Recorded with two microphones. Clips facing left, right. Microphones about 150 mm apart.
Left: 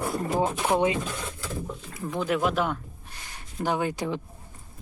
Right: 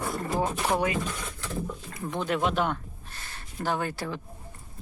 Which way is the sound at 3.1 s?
15° left (ahead or behind).